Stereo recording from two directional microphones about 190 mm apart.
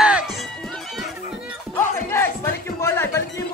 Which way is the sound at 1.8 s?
15° left (ahead or behind).